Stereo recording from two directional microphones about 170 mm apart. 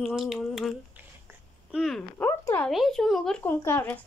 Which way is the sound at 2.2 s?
15° left (ahead or behind).